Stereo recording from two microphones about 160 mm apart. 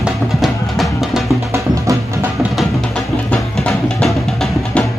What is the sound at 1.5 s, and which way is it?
Music, 15° right (ahead or behind).